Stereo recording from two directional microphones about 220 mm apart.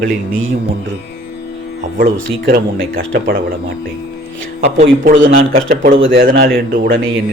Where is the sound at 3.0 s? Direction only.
60° right (ahead or behind).